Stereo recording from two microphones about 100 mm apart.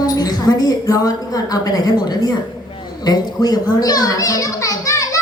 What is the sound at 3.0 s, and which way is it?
Children playing, 40° left (ahead or behind).